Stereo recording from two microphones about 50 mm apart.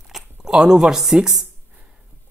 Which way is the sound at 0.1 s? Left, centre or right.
Centre.